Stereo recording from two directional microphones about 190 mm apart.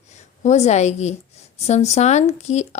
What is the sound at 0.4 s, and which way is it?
Speech, 35° left (ahead or behind).